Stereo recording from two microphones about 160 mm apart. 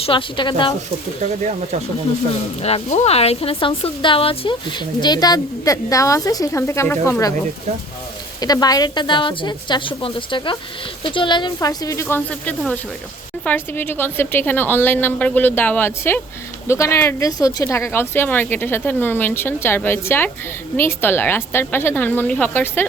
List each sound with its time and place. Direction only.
0.0 s speech: 35° left (ahead or behind)
1.2 s speech: 45° right (ahead or behind)
2.6 s a woman's voice: 40° left (ahead or behind); by 7.3 s 20° left (ahead or behind)
8.4 s a woman's voice: 25° left (ahead or behind)